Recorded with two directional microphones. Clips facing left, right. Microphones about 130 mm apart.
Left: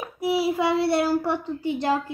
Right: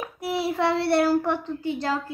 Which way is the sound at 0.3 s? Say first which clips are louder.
Left 2 dB; centre (ahead or behind).